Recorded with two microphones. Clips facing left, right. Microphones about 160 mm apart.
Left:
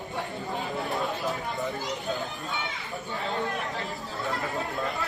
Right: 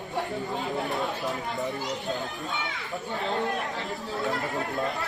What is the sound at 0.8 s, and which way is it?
Speech, centre (ahead or behind).